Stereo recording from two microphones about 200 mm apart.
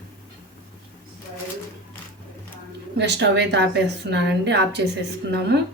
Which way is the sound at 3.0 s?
60° right (ahead or behind).